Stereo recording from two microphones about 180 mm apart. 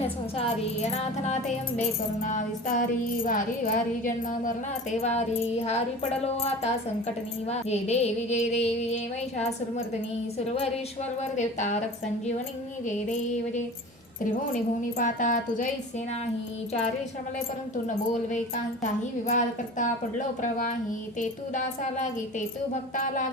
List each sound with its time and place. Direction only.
0.3 s speech: 35° left (ahead or behind)
10.3 s speech: 35° left (ahead or behind)
12.9 s a woman's voice: 40° left (ahead or behind)
17.8 s a woman's voice: 45° left (ahead or behind)